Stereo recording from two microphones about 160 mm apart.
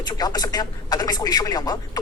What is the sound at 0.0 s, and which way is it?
Speech, 25° left (ahead or behind).